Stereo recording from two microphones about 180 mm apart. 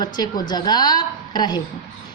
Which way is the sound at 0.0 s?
25° left (ahead or behind).